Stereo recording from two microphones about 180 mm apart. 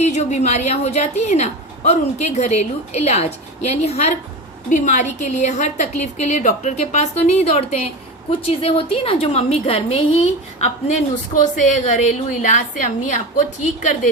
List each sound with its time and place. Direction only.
0.0 s a woman's voice: 40° left (ahead or behind)